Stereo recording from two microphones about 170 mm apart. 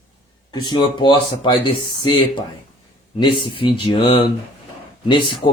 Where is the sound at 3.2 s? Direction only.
30° left (ahead or behind).